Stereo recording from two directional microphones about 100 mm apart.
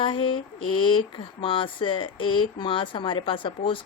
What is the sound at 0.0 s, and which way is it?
Speech, 60° left (ahead or behind).